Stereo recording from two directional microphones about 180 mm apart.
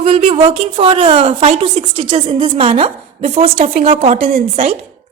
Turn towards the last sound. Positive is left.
turn(degrees=-35)  # may be behind; listen again after turning